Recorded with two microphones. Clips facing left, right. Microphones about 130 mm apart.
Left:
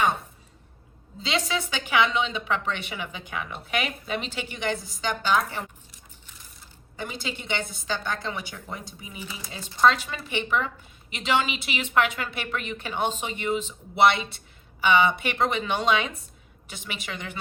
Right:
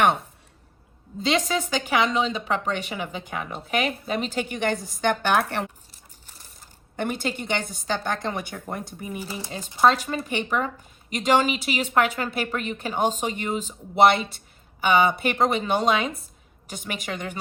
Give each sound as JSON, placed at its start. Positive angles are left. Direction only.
{"t": 1.2, "sound": "speech", "side_deg": -50}
{"t": 5.9, "sound": "a sound", "side_deg": -40}
{"t": 6.9, "sound": "speech", "side_deg": -60}
{"t": 9.1, "sound": "speech", "side_deg": -35}